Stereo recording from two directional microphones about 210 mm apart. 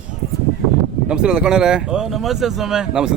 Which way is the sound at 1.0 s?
5° right (ahead or behind).